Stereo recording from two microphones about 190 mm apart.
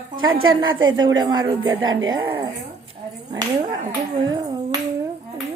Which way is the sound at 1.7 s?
90° right.